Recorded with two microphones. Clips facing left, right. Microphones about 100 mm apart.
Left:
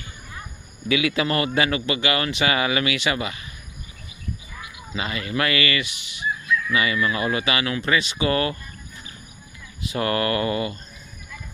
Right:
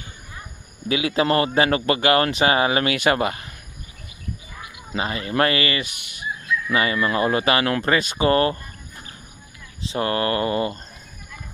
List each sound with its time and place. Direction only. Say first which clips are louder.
0.8 s a man's voice: right 2 dB; 35° right (ahead or behind)
4.9 s a man's voice: right 4 dB; 40° right (ahead or behind)
5.9 s fowl: even; 50° right (ahead or behind)
6.7 s a man's voice: right 4 dB; 40° right (ahead or behind)
9.8 s mantra: right 1 dB; 25° right (ahead or behind)